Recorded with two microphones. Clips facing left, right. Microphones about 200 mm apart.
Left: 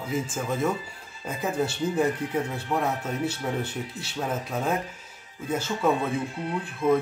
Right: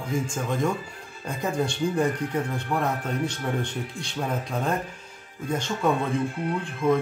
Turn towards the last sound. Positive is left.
turn(degrees=5)  # may be behind; listen again after turning